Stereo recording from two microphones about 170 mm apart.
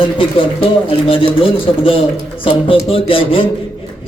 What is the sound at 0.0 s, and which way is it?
Speech, 30° left (ahead or behind).